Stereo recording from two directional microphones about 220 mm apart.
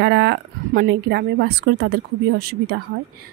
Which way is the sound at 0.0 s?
55° right (ahead or behind).